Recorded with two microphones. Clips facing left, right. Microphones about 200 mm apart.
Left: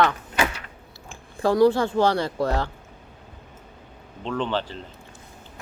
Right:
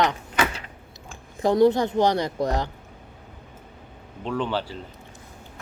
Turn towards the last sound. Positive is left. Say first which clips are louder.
# even
turn(degrees=-10)  # may be behind; listen again after turning